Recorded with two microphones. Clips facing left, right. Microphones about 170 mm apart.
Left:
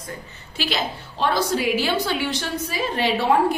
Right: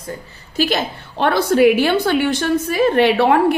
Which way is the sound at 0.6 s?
50° right (ahead or behind).